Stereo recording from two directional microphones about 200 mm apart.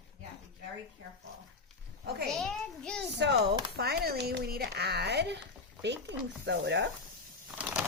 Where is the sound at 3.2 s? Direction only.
55° right (ahead or behind).